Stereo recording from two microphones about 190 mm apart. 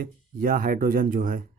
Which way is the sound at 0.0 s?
50° right (ahead or behind).